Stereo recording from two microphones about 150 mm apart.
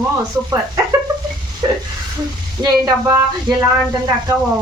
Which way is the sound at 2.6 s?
25° right (ahead or behind).